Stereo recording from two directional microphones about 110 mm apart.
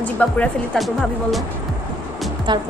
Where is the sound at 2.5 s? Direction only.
45° right (ahead or behind).